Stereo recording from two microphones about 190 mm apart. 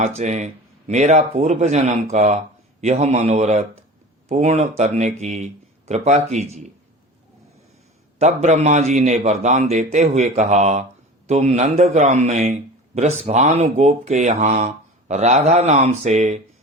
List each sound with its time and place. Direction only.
0.2 s a man's voice: 35° right (ahead or behind)
8.2 s a man's voice: 35° right (ahead or behind)